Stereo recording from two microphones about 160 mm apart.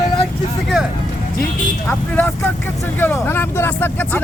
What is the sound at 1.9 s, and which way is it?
Speech, 10° left (ahead or behind).